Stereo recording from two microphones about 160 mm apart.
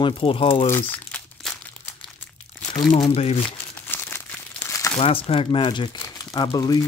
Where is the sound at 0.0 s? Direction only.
35° left (ahead or behind).